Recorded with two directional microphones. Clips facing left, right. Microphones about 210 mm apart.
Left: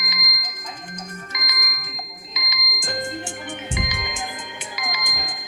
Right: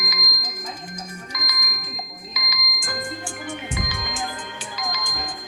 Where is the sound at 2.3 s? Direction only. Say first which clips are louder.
Even; 20° left (ahead or behind).